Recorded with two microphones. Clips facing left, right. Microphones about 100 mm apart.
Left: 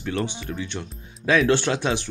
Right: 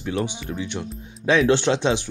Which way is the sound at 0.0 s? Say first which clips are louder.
Right 1 dB; 15° right (ahead or behind).